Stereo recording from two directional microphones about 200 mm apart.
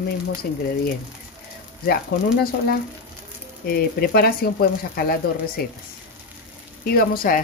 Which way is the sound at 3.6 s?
50° left (ahead or behind).